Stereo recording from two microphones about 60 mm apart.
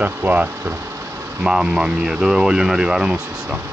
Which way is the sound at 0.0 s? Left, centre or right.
Right.